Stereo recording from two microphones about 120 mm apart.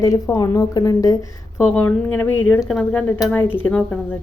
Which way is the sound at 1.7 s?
15° left (ahead or behind).